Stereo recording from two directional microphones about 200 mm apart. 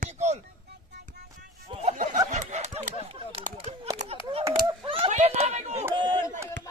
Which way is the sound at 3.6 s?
25° right (ahead or behind).